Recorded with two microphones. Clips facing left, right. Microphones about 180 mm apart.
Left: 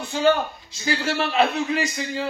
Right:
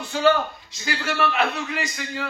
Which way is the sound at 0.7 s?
25° left (ahead or behind).